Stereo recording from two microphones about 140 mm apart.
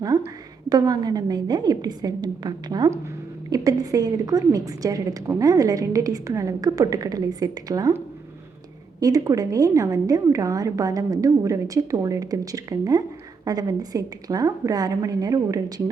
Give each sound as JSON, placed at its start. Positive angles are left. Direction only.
{"t": 0.7, "sound": "a woman's voice", "side_deg": -25}